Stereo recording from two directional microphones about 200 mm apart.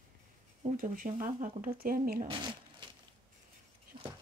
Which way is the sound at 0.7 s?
40° right (ahead or behind).